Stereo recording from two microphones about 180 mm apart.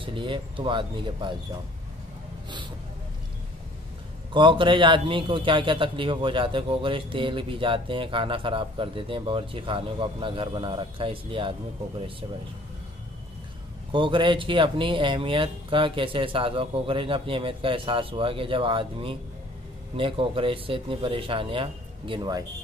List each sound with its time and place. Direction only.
0.0 s a man's voice: 25° right (ahead or behind)
4.3 s a man's voice: 25° right (ahead or behind)
13.9 s a man's voice: 25° right (ahead or behind)